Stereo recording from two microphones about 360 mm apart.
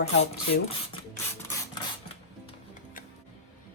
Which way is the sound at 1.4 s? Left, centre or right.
Centre.